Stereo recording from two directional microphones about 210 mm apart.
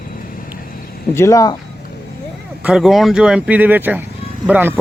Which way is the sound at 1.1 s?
15° left (ahead or behind).